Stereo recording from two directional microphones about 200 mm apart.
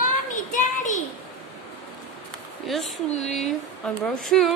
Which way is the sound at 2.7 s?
Centre (ahead or behind).